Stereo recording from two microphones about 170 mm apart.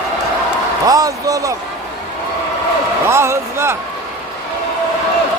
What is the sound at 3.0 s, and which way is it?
Speech, 15° right (ahead or behind).